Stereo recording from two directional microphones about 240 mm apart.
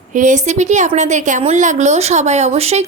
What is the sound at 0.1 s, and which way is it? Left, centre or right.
A woman's voice, right.